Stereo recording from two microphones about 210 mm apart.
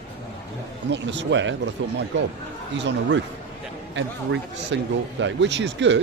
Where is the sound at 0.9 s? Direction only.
55° right (ahead or behind).